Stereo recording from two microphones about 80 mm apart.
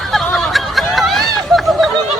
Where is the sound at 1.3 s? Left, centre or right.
Centre.